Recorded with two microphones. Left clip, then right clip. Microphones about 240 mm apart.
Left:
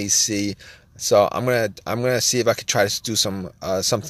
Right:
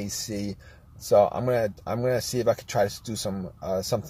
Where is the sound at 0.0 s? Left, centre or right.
Left.